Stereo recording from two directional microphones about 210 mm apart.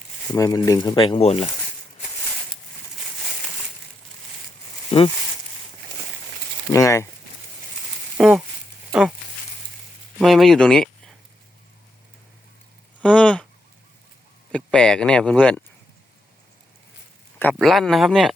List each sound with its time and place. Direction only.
0.3 s speech: 15° left (ahead or behind)
4.9 s speech: 25° left (ahead or behind)
6.7 s speech: 15° left (ahead or behind)
8.2 s speech: centre (ahead or behind)
10.2 s speech: centre (ahead or behind)
13.0 s a sound: 5° left (ahead or behind)
14.5 s a sound: 5° left (ahead or behind)
17.4 s speech: centre (ahead or behind)